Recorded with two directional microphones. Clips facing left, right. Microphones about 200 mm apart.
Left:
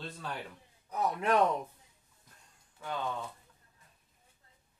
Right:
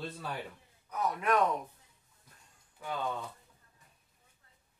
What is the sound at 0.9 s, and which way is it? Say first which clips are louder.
Speech: left 1 dB; 30° left (ahead or behind).